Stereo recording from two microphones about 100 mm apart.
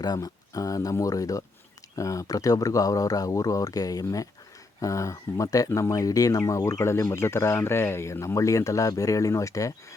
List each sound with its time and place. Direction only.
0.0 s speech: 40° left (ahead or behind)